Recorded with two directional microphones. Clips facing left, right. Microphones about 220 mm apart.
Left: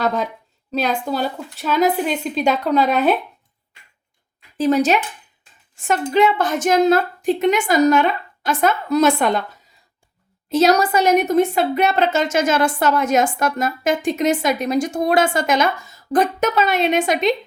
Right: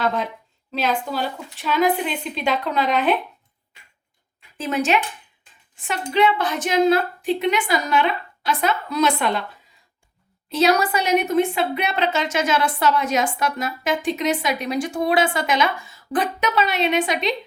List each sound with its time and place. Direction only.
0.0 s a woman's voice: 40° left (ahead or behind)
4.5 s a woman's voice: 40° left (ahead or behind)
10.5 s a woman's voice: 45° left (ahead or behind)